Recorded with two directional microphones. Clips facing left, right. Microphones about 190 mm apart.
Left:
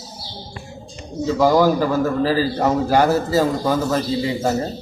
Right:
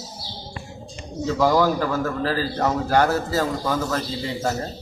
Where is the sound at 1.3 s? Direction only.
15° left (ahead or behind).